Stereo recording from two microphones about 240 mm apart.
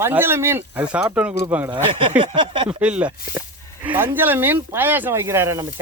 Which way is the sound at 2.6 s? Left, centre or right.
Centre.